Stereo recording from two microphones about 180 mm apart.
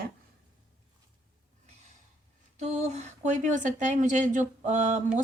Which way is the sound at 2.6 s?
40° right (ahead or behind).